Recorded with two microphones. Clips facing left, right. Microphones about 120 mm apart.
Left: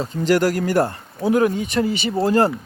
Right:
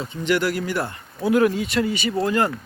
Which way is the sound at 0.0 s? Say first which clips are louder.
Left 4 dB; 40° left (ahead or behind).